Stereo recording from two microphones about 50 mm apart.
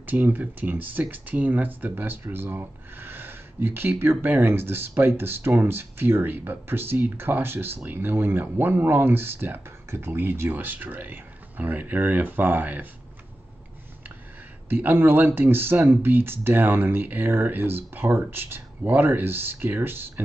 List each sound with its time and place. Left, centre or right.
0.0 s speech: right
14.7 s speech: right